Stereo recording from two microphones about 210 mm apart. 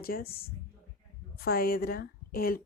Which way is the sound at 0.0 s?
45° left (ahead or behind).